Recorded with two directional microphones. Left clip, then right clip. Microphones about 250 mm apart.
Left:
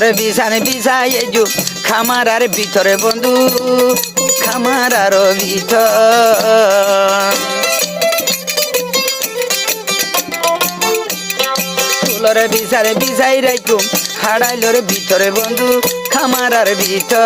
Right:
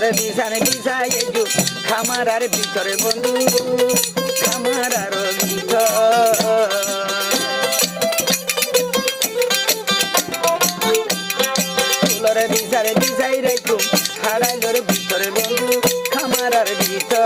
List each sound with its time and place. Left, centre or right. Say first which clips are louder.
0.0 s music: left 7 dB; left
11.3 s music: left 4 dB; left